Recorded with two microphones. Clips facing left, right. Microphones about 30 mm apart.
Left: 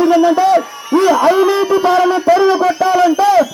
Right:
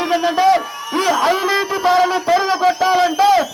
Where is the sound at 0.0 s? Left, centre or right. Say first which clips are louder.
Left 5 dB; right.